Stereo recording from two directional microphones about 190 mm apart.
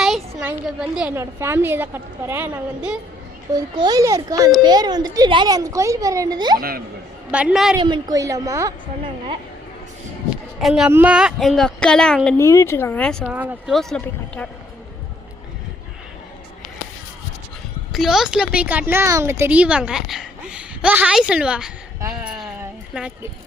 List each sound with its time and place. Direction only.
0.0 s a woman's voice: centre (ahead or behind)
3.5 s a woman's voice: 20° right (ahead or behind)
6.6 s speech: 50° right (ahead or behind)
7.3 s speech: 5° right (ahead or behind)
7.8 s a woman's voice: 25° right (ahead or behind)
10.2 s speech: centre (ahead or behind)
13.3 s speech: 10° right (ahead or behind)
17.9 s a woman's voice: centre (ahead or behind)